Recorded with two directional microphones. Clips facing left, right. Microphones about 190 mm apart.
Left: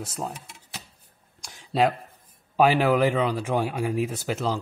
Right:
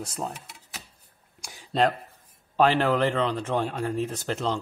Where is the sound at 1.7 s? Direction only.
5° left (ahead or behind).